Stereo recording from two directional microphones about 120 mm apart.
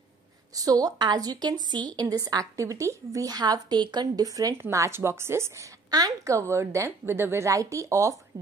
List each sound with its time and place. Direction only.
0.6 s a woman's voice: 30° right (ahead or behind)
5.9 s a woman's voice: 35° right (ahead or behind)